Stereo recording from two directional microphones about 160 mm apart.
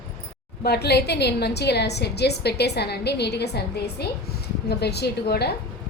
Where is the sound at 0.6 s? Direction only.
90° left.